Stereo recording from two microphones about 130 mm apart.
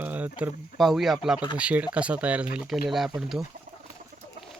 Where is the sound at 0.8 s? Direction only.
Centre (ahead or behind).